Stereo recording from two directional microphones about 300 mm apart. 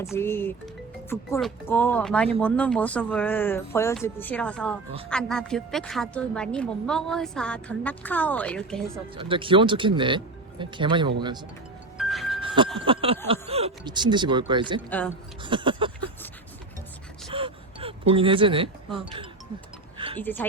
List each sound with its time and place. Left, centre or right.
0.0 s a woman's voice: centre
9.1 s speech: centre
11.9 s music: centre
12.7 s speech: centre
14.8 s a woman's voice: centre
15.4 s a sound: centre
17.3 s a sound: centre
18.9 s speech: centre
20.1 s speech: centre